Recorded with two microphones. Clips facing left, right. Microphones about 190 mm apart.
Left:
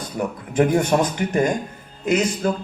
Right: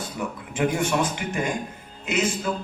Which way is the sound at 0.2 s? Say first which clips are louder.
Left 7 dB; 45° left (ahead or behind).